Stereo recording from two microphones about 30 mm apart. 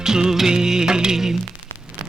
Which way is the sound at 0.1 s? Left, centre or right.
Right.